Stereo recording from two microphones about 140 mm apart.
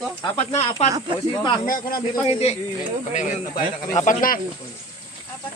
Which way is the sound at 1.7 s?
85° left.